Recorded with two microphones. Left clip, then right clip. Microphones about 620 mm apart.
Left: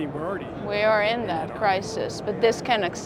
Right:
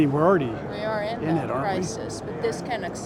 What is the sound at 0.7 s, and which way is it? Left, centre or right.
Speech, left.